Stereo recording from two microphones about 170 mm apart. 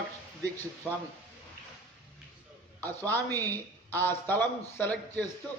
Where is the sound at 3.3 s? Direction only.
20° right (ahead or behind).